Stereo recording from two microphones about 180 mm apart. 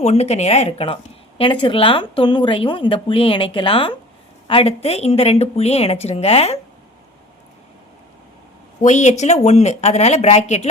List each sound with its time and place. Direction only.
0.0 s a woman's voice: 40° left (ahead or behind)
8.8 s a woman's voice: 40° left (ahead or behind)